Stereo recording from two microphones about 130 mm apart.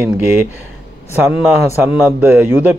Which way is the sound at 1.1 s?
10° right (ahead or behind).